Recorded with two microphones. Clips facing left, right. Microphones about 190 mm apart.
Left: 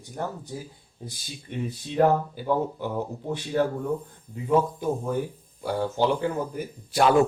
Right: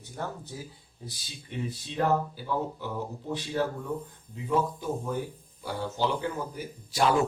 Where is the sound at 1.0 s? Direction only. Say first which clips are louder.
Left 4 dB; 55° left (ahead or behind).